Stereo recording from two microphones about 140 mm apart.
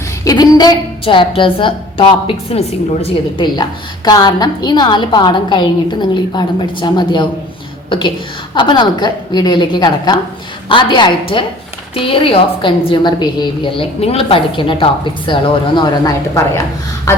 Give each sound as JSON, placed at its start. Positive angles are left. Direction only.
{"t": 0.3, "sound": "a sound", "side_deg": 30}
{"t": 1.0, "sound": "a woman's voice", "side_deg": 40}
{"t": 3.4, "sound": "a woman's voice", "side_deg": 30}